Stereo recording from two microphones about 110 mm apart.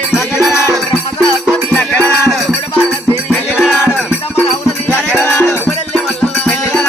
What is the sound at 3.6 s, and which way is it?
Music, 5° right (ahead or behind).